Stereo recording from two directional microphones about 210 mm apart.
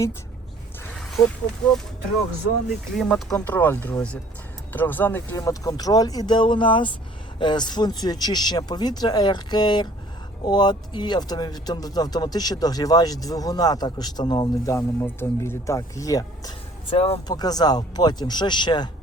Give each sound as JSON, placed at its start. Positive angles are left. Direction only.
{"t": 0.9, "sound": "a sound", "side_deg": 0}
{"t": 2.9, "sound": "speech", "side_deg": 0}
{"t": 16.9, "sound": "speech", "side_deg": 30}